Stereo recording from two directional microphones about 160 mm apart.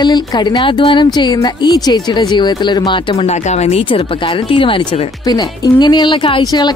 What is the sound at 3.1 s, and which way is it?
Speech, 45° left (ahead or behind).